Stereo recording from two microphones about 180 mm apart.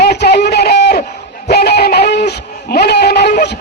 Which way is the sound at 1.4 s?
65° left (ahead or behind).